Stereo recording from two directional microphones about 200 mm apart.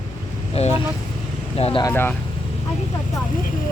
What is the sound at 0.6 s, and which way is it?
Speech, 30° left (ahead or behind).